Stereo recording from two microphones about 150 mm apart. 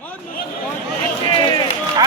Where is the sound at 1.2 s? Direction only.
30° left (ahead or behind).